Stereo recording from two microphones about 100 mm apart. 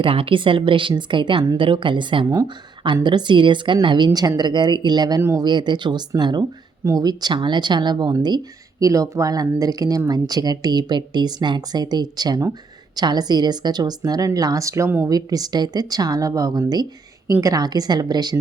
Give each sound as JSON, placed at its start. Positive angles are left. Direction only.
{"t": 0.0, "sound": "a woman's voice", "side_deg": -65}
{"t": 8.8, "sound": "a woman's voice", "side_deg": -35}